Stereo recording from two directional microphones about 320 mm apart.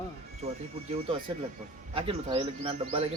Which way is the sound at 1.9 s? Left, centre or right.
Centre.